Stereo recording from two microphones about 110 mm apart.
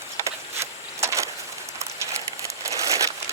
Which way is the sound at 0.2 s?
25° right (ahead or behind).